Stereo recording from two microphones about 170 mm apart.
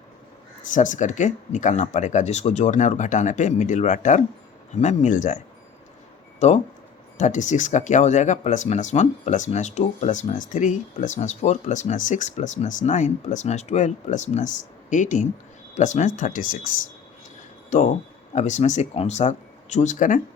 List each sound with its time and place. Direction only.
0.7 s speech: 50° left (ahead or behind)
6.4 s speech: 40° left (ahead or behind)